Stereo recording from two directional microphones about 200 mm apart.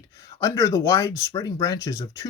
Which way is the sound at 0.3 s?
15° left (ahead or behind).